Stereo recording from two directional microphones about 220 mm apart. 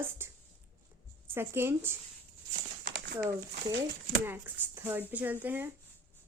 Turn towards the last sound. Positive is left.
turn(degrees=-10)  # may be behind; listen again after turning